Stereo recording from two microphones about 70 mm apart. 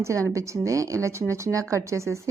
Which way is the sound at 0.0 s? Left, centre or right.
Right.